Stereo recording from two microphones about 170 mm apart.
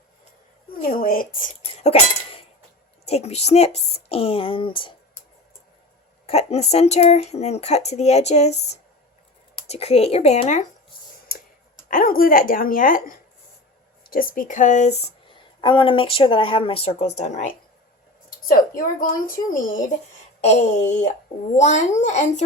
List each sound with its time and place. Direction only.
0.7 s speech: 60° left (ahead or behind)
1.8 s a sound: 35° left (ahead or behind)
3.1 s speech: 40° left (ahead or behind)
6.2 s speech: 40° left (ahead or behind)
11.9 s speech: 55° left (ahead or behind)
18.4 s speech: 55° left (ahead or behind)